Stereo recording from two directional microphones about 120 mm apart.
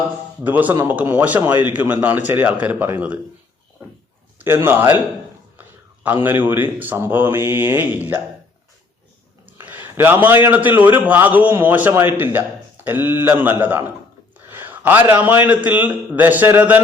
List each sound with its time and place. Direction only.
0.4 s a man's voice: 15° right (ahead or behind)
4.4 s a man's voice: 20° right (ahead or behind)
5.5 s a sound: 15° right (ahead or behind)
6.2 s a man's voice: 15° right (ahead or behind)
9.5 s a sound: 15° right (ahead or behind)
10.4 s a man's voice: 15° right (ahead or behind)